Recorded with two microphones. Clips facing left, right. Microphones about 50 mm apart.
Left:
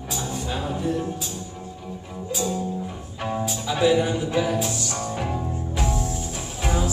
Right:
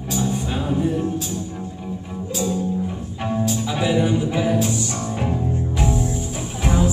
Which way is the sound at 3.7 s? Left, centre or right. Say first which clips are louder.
Left 2 dB; centre.